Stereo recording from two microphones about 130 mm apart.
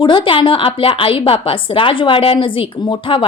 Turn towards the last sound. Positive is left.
turn(degrees=40)  # may be behind; listen again after turning